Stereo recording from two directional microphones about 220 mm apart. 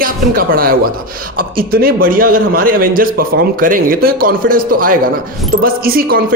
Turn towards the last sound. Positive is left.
turn(degrees=-40)  # may be behind; listen again after turning